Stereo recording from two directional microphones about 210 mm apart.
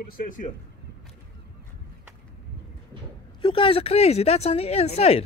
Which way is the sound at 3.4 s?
25° left (ahead or behind).